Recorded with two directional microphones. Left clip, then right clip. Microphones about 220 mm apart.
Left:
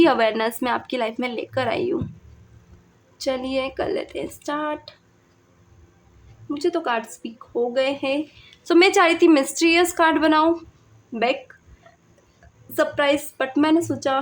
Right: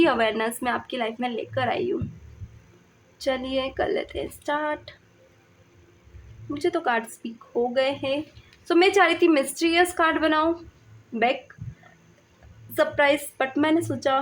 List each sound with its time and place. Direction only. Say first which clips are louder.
0.0 s a woman's voice: left 4 dB; 15° left (ahead or behind)
3.2 s a woman's voice: left 2 dB; 10° left (ahead or behind)
6.5 s a woman's voice: left 1 dB; 10° left (ahead or behind)
12.7 s a woman's voice: left 1 dB; 10° left (ahead or behind)